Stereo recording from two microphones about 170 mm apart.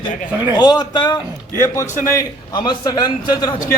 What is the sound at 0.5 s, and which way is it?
A man's voice, 25° left (ahead or behind).